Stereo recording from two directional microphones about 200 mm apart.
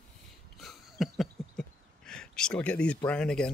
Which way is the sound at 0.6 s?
Centre (ahead or behind).